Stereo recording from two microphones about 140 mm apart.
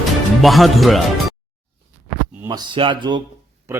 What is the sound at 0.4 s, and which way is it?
Speech, centre (ahead or behind).